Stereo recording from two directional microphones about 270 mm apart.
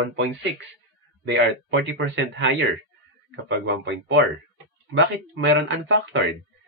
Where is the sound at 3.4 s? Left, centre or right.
Right.